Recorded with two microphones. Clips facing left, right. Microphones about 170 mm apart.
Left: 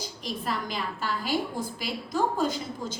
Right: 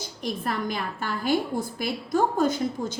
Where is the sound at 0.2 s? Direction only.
55° right (ahead or behind).